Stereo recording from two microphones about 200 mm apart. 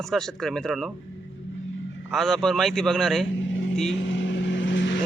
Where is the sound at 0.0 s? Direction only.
Centre (ahead or behind).